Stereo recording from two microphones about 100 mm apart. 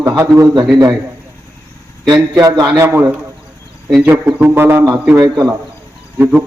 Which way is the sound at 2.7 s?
20° right (ahead or behind).